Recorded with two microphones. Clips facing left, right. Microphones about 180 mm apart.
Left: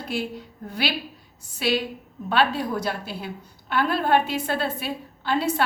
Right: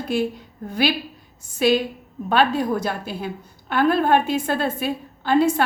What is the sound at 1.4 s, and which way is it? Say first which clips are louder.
A woman's voice: right 6 dB; 45° right (ahead or behind).